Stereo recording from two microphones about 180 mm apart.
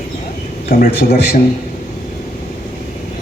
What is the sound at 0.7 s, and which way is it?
Speech, 60° left (ahead or behind).